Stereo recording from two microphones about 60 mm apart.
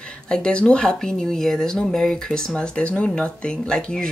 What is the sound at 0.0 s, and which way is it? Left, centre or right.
Speech, centre.